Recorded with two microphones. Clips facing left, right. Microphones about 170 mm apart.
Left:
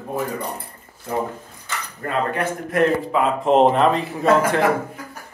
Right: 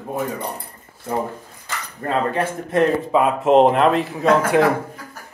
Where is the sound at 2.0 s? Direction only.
25° right (ahead or behind).